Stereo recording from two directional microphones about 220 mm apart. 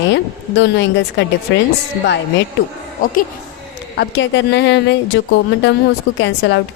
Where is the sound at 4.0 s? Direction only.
55° left (ahead or behind).